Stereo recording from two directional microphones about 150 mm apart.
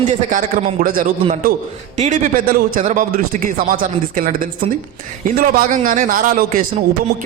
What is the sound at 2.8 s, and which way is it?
Speech, 55° right (ahead or behind).